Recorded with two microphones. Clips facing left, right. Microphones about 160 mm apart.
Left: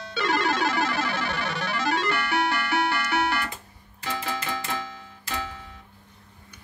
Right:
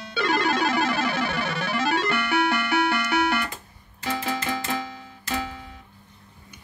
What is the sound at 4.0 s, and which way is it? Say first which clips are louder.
Music: right 3 dB; 15° right (ahead or behind).